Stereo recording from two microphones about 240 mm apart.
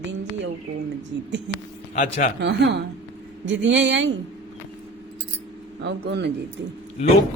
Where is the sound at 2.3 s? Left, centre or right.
Right.